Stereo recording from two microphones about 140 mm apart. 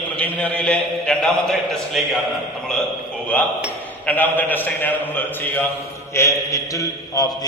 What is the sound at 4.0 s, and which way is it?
A man's voice, 10° left (ahead or behind).